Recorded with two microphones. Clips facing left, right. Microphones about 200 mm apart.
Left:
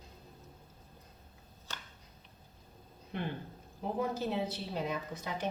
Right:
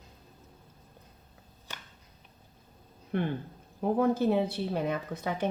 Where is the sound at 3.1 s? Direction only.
55° right (ahead or behind).